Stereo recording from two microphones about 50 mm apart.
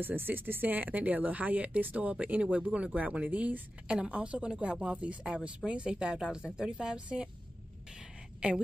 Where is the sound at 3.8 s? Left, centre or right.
Centre.